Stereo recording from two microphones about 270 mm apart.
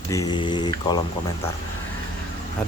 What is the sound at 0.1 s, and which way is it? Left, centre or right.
Speech, centre.